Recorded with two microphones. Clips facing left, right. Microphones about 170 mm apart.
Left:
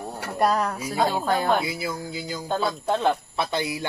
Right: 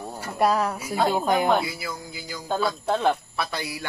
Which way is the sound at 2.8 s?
5° right (ahead or behind).